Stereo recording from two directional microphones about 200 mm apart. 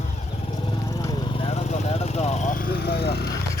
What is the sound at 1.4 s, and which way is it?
Vehicle, 30° left (ahead or behind).